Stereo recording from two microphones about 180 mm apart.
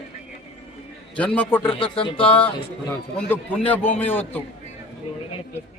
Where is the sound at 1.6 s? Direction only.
30° left (ahead or behind).